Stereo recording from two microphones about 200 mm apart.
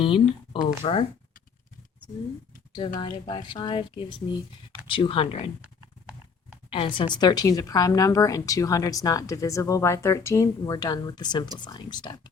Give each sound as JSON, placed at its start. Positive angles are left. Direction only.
{"t": 0.0, "sound": "speech", "side_deg": 25}
{"t": 3.2, "sound": "speech", "side_deg": 25}
{"t": 5.6, "sound": "clip-clop", "side_deg": -5}
{"t": 6.7, "sound": "speech", "side_deg": 25}